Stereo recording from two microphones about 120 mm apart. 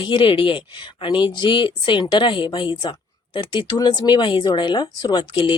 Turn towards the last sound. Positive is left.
turn(degrees=45)  # may be behind; listen again after turning